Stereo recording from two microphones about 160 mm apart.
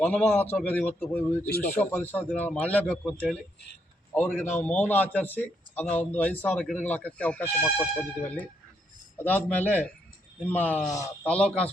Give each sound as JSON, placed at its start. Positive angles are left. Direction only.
{"t": 0.0, "sound": "a man's voice", "side_deg": 10}
{"t": 11.2, "sound": "a man's voice", "side_deg": 5}